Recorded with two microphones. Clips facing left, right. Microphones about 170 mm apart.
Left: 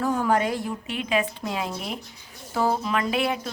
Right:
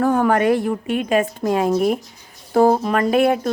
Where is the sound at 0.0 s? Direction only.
60° right (ahead or behind).